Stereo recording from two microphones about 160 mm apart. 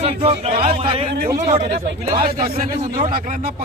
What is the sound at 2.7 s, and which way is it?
Speech, 25° right (ahead or behind).